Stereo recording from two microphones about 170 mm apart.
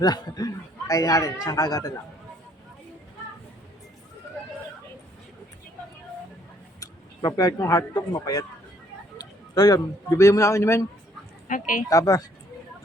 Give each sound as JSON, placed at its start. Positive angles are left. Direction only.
{"t": 0.0, "sound": "speech", "side_deg": 20}
{"t": 6.7, "sound": "speech", "side_deg": 20}
{"t": 11.4, "sound": "a woman's voice", "side_deg": 50}
{"t": 11.9, "sound": "speech", "side_deg": 20}